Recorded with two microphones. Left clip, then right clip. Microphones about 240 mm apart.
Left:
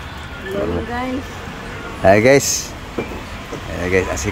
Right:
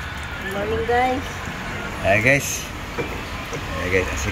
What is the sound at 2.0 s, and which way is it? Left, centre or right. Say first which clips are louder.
Speech: left 6 dB; left.